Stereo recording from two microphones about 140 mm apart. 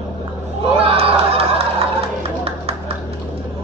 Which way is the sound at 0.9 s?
45° right (ahead or behind).